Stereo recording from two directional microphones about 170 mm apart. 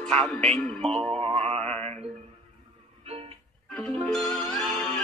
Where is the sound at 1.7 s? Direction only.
40° right (ahead or behind).